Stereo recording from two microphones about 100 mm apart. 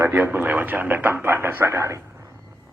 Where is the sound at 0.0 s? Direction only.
20° right (ahead or behind).